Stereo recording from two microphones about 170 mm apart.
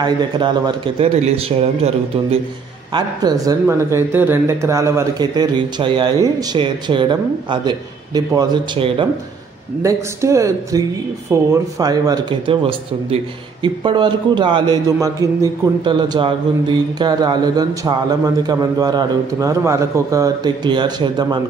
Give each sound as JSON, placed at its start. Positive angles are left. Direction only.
{"t": 0.0, "sound": "a man's voice", "side_deg": -25}
{"t": 2.9, "sound": "a man's voice", "side_deg": -25}
{"t": 9.8, "sound": "speech", "side_deg": -15}